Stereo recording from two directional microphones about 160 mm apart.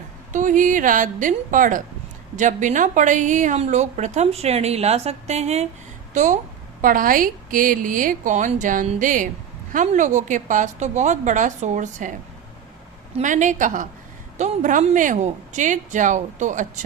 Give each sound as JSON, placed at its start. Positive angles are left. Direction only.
{"t": 0.3, "sound": "a woman's voice", "side_deg": -55}
{"t": 13.1, "sound": "a woman's voice", "side_deg": -50}